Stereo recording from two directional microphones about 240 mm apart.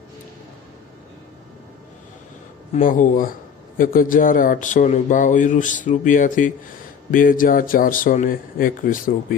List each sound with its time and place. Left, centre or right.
2.7 s speech: left